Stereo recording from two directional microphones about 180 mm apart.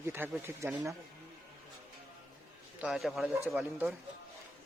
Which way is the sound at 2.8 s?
Centre (ahead or behind).